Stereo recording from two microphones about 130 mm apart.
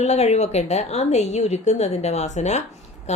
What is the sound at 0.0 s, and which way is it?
Speech, 55° left (ahead or behind).